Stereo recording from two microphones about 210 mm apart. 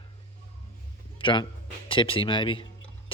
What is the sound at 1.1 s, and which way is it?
A man's voice, 25° left (ahead or behind).